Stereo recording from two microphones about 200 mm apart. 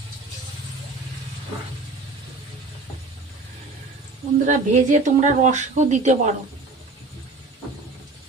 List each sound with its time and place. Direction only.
4.5 s a woman's voice: 40° right (ahead or behind)